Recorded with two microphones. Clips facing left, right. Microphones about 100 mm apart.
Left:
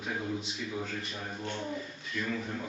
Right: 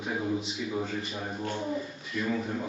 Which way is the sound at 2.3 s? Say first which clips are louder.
Right 6 dB; 15° right (ahead or behind).